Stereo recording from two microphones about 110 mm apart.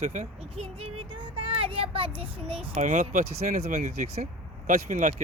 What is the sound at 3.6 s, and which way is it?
Speech, 80° right.